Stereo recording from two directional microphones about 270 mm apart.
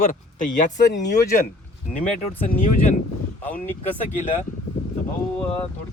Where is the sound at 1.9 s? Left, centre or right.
Left.